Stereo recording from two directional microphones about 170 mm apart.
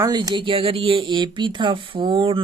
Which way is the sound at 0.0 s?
25° right (ahead or behind).